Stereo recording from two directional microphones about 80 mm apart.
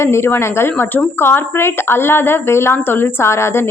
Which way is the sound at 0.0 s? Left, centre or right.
Left.